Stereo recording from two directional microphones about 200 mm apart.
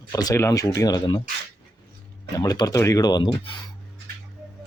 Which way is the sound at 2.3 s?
15° left (ahead or behind).